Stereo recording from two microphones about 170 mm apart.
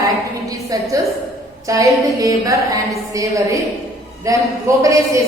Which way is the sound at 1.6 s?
20° right (ahead or behind).